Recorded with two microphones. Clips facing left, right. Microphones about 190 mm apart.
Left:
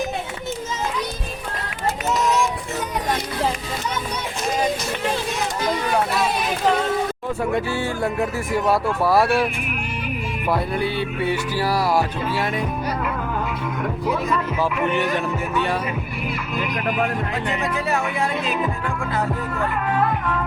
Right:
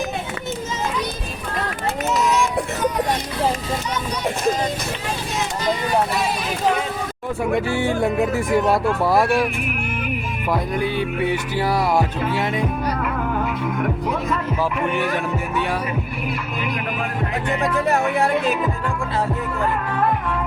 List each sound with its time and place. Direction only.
7.5 s speech: 15° right (ahead or behind)
10.8 s music: 15° right (ahead or behind)